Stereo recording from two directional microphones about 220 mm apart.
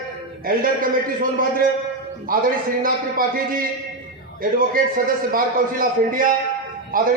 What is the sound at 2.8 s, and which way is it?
Speech, 40° right (ahead or behind).